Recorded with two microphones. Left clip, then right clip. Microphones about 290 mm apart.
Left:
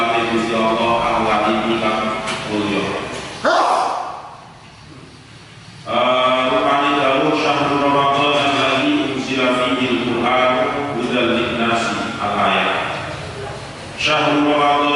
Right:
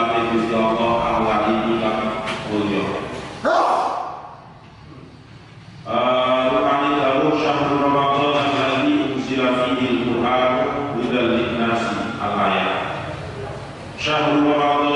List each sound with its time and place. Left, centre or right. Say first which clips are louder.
0.0 s music: left 2 dB; centre
2.7 s a man's voice: left 2 dB; centre
3.4 s a sound: left 2 dB; centre
5.9 s mantra: left 2 dB; centre
9.4 s a sound: left 2 dB; centre
14.1 s mantra: left 2 dB; centre